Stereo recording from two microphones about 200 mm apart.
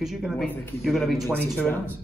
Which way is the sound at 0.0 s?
Centre (ahead or behind).